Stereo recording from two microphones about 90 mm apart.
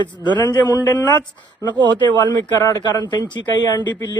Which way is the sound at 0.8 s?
20° left (ahead or behind).